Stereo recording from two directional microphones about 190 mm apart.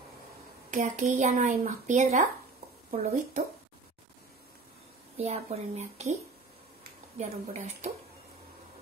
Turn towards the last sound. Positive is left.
turn(degrees=-40)  # may be behind; listen again after turning